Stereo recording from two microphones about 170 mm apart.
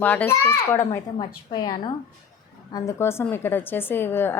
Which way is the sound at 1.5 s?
25° left (ahead or behind).